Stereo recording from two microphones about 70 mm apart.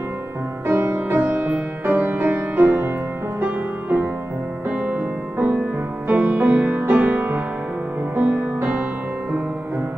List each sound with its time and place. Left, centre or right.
0.7 s music: right